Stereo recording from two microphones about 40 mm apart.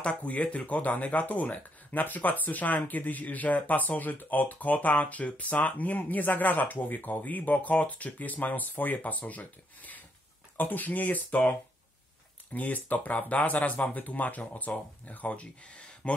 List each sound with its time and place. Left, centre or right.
0.0 s speech: left
11.2 s speech: left
12.5 s speech: left